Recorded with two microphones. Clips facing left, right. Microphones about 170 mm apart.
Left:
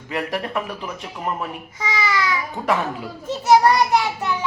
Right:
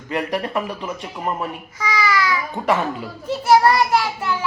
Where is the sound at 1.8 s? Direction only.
25° left (ahead or behind).